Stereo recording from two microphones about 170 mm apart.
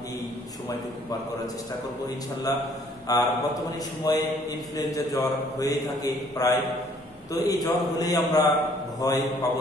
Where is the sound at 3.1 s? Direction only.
20° left (ahead or behind).